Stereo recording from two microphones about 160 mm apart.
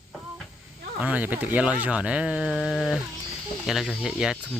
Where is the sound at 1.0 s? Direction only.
10° right (ahead or behind).